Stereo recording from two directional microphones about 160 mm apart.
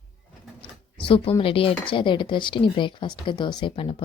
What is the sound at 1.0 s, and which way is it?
Speech, 35° left (ahead or behind).